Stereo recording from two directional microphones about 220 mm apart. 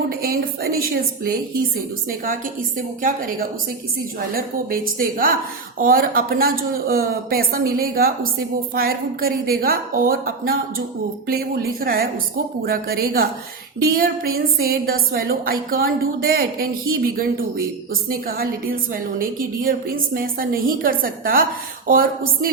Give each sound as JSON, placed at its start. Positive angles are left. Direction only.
{"t": 0.2, "sound": "a woman's voice", "side_deg": -40}